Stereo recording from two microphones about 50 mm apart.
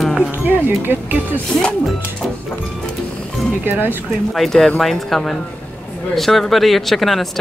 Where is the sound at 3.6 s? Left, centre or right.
Right.